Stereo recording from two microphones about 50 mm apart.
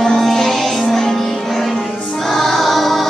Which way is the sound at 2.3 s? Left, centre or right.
Centre.